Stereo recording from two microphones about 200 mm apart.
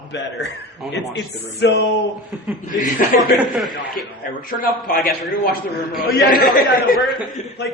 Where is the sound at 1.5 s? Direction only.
60° left (ahead or behind).